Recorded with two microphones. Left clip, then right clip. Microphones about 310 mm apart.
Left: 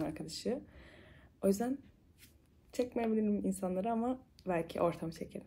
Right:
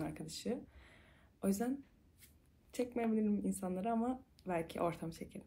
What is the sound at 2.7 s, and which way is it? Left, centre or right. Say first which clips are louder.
Speech: left 3 dB; centre.